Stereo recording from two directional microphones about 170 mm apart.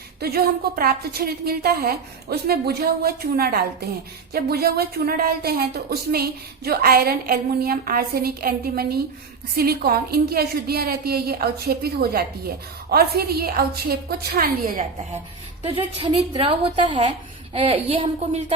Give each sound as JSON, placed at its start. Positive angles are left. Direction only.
{"t": 0.2, "sound": "a woman's voice", "side_deg": -65}
{"t": 15.6, "sound": "a woman's voice", "side_deg": -35}